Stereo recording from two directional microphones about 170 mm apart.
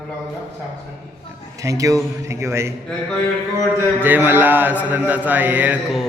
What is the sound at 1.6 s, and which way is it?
Speech, 20° right (ahead or behind).